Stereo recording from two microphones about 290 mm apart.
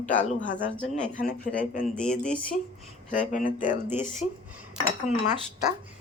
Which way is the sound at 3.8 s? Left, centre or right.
Centre.